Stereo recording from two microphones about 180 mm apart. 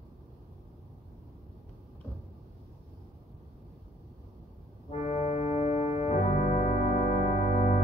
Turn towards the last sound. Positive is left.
turn(degrees=40)  # may be behind; listen again after turning